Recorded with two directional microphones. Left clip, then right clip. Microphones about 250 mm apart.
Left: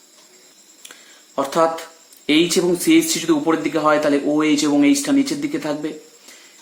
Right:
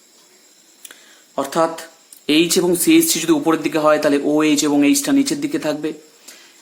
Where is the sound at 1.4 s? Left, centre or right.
Centre.